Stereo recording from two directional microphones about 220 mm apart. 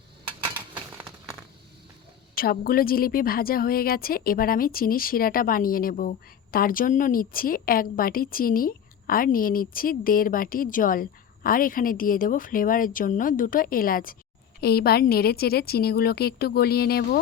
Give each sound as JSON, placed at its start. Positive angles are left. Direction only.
{"t": 2.3, "sound": "a woman's voice", "side_deg": 40}